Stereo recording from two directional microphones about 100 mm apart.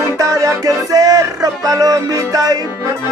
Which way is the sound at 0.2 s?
30° right (ahead or behind).